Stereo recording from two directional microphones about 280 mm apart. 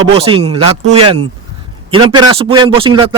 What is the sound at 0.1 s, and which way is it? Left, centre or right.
A man's voice, right.